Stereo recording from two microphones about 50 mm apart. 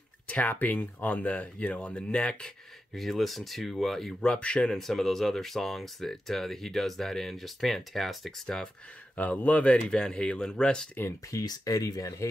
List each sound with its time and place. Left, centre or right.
0.3 s speech: left
2.9 s speech: centre
4.2 s speech: left
4.7 s speech: centre
9.1 s speech: left; by 10.9 s centre
11.3 s speech: left